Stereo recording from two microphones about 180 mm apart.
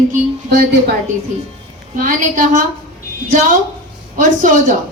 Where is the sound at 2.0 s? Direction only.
45° right (ahead or behind).